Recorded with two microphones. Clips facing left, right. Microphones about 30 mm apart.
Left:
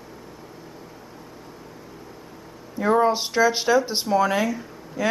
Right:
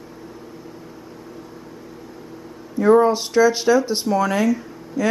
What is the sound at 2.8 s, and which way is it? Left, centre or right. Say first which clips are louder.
Speech: right 5 dB; centre.